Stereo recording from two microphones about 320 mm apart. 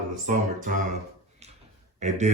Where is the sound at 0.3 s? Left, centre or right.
Right.